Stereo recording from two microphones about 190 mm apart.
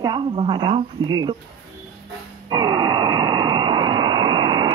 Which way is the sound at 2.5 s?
20° right (ahead or behind).